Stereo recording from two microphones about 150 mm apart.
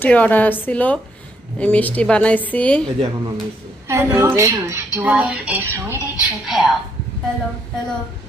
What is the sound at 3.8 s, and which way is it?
Speech, 15° right (ahead or behind).